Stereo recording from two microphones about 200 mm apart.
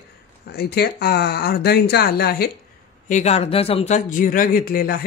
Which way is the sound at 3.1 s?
35° left (ahead or behind).